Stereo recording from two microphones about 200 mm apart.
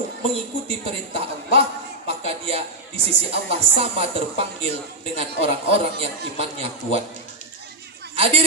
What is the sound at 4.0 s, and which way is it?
Speech, 30° right (ahead or behind).